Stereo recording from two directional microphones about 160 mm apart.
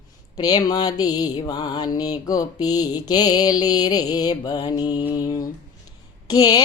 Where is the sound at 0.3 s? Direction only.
25° left (ahead or behind).